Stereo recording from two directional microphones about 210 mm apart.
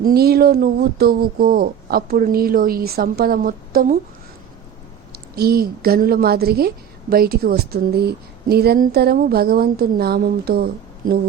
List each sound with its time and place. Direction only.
0.0 s a woman's voice: 45° right (ahead or behind)
5.1 s a woman's voice: 45° right (ahead or behind)